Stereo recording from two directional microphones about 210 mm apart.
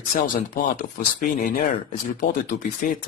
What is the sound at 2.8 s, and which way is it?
Speech, 40° left (ahead or behind).